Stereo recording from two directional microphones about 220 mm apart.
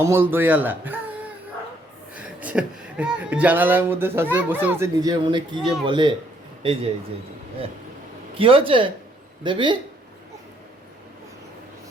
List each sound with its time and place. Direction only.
0.0 s speech: 10° right (ahead or behind)
2.1 s speech: 5° right (ahead or behind)
8.4 s speech: 25° right (ahead or behind)